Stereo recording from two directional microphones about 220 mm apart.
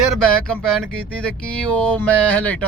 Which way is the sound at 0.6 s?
5° left (ahead or behind).